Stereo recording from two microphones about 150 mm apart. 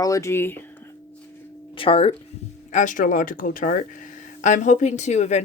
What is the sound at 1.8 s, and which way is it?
Female singing, 40° left (ahead or behind).